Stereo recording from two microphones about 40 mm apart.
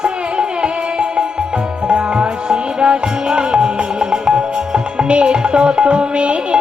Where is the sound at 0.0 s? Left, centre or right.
Right.